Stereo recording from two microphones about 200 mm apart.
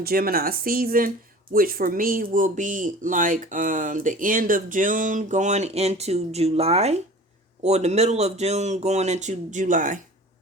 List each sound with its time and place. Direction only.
0.0 s speech: 50° right (ahead or behind)